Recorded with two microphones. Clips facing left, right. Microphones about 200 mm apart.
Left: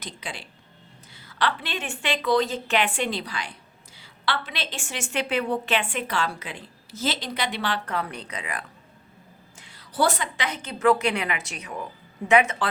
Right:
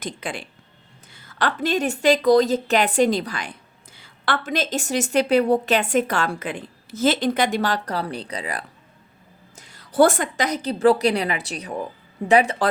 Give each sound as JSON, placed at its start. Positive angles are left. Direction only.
{"t": 0.0, "sound": "a woman's voice", "side_deg": -50}